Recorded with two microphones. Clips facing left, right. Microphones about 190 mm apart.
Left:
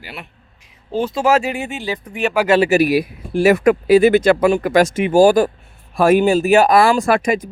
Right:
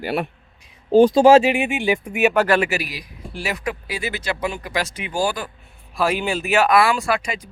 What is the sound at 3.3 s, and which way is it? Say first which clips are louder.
Speech: left 14 dB; 55° left (ahead or behind).